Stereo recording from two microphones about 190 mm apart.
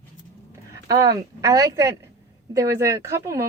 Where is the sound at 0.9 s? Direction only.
20° right (ahead or behind).